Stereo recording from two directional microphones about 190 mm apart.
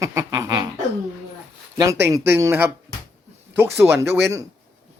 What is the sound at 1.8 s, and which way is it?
A man's voice, 15° right (ahead or behind).